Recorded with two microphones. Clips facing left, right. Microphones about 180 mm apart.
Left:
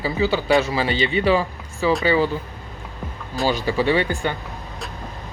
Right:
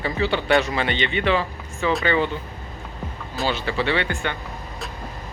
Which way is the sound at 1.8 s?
5° left (ahead or behind).